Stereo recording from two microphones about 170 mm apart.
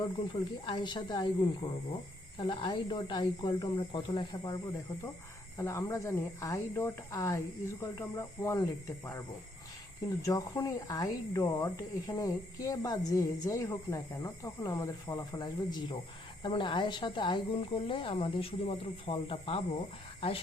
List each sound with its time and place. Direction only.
0.6 s speech: 25° left (ahead or behind)
10.2 s speech: 20° left (ahead or behind)